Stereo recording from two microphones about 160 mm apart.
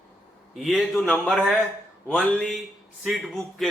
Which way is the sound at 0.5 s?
Centre (ahead or behind).